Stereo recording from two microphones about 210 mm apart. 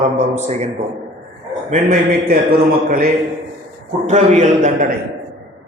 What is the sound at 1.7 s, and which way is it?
Speech, 40° right (ahead or behind).